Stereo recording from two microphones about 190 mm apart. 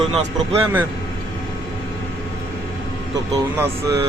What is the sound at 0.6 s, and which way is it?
Speech, 10° right (ahead or behind).